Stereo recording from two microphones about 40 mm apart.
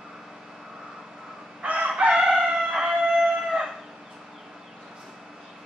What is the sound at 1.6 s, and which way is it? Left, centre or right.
Chicken, right.